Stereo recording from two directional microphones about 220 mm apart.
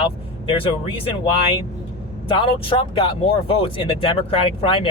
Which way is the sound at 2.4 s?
25° left (ahead or behind).